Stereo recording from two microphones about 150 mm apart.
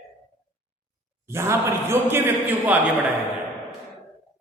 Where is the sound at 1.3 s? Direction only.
15° right (ahead or behind).